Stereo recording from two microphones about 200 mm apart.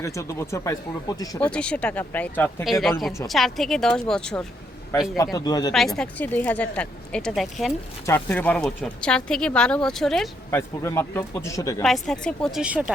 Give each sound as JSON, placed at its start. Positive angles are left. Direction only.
{"t": 0.0, "sound": "speech", "side_deg": 15}
{"t": 1.4, "sound": "speech", "side_deg": 5}
{"t": 5.1, "sound": "speech", "side_deg": 20}
{"t": 5.7, "sound": "speech", "side_deg": 0}
{"t": 11.8, "sound": "speech", "side_deg": 0}